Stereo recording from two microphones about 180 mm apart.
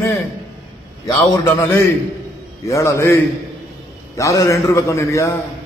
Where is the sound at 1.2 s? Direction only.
15° left (ahead or behind).